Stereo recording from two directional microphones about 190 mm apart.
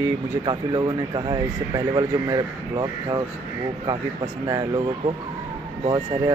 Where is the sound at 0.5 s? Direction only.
25° right (ahead or behind).